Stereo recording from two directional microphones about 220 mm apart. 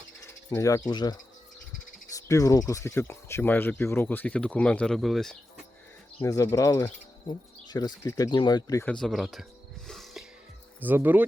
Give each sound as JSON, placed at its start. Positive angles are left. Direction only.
{"t": 0.5, "sound": "speech", "side_deg": 10}
{"t": 6.2, "sound": "speech", "side_deg": 15}
{"t": 8.8, "sound": "cricket", "side_deg": 5}
{"t": 10.8, "sound": "speech", "side_deg": -10}